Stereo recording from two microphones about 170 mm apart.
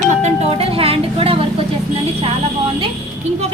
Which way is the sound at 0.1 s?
45° right (ahead or behind).